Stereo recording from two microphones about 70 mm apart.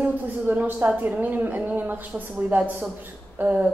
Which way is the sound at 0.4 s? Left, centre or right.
Right.